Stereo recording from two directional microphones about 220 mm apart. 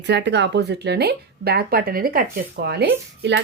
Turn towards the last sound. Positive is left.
turn(degrees=-50)  # may be behind; listen again after turning